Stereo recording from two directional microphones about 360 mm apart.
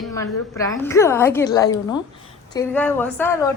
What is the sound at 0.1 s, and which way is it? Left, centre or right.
A woman's voice, centre.